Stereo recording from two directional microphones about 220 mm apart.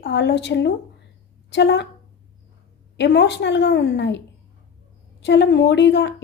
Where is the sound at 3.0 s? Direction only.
50° left (ahead or behind).